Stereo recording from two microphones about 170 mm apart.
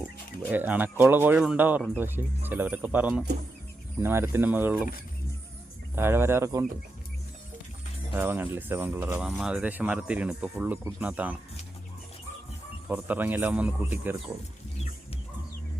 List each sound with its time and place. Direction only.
0.5 s speech: 10° right (ahead or behind)
6.0 s speech: 15° right (ahead or behind)
8.1 s speech: 10° right (ahead or behind)
12.9 s speech: 10° right (ahead or behind)